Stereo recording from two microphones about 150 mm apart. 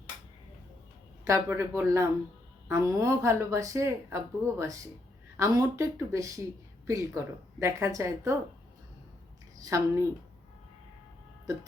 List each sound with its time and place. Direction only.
1.3 s a woman's voice: 20° right (ahead or behind)
9.6 s a woman's voice: 20° right (ahead or behind)